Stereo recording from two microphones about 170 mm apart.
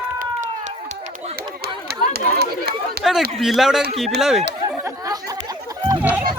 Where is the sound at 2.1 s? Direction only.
70° right (ahead or behind).